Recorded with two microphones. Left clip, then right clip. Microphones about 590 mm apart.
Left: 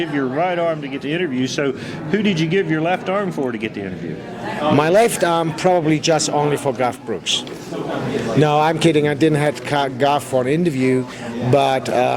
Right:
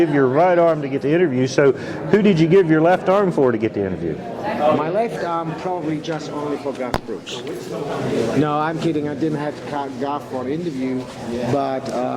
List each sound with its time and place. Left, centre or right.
0.2 s a man's voice: right
4.8 s speech: left
8.4 s speech: left
11.5 s a man's voice: left